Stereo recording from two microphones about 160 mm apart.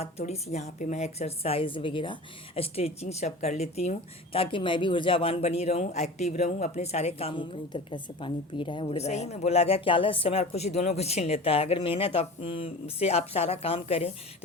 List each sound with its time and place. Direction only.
0.0 s speech: 40° left (ahead or behind)